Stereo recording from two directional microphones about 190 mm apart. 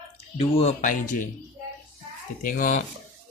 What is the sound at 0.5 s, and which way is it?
Speech, 40° left (ahead or behind).